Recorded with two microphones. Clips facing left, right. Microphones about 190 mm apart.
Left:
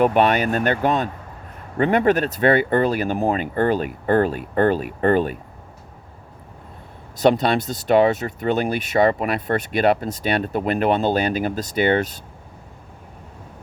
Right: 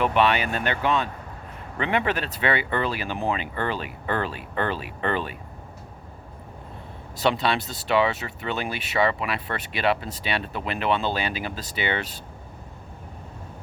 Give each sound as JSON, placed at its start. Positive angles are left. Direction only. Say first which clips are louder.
{"t": 0.0, "sound": "speech", "louder": "left 5 dB", "side_deg": 45}
{"t": 7.2, "sound": "speech", "louder": "left 6 dB", "side_deg": 45}